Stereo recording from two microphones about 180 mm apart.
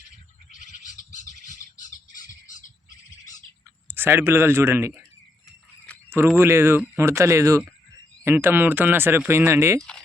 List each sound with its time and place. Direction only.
0.5 s bird: 45° left (ahead or behind)
3.8 s speech: 10° right (ahead or behind)
6.3 s speech: 15° right (ahead or behind)